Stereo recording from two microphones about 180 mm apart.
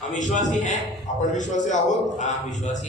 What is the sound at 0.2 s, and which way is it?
A man's voice, 45° left (ahead or behind).